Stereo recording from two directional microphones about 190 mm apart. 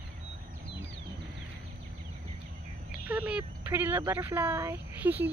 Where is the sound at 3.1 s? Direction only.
10° right (ahead or behind).